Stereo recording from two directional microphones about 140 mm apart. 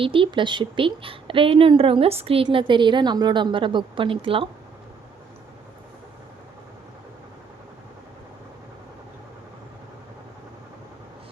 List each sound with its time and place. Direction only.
0.0 s a woman's voice: 40° right (ahead or behind)